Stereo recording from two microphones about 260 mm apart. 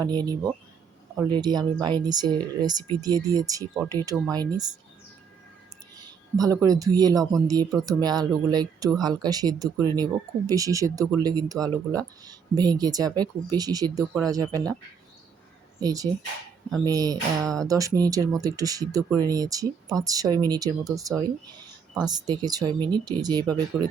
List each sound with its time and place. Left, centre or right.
0.0 s speech: centre
6.3 s speech: centre
15.8 s speech: centre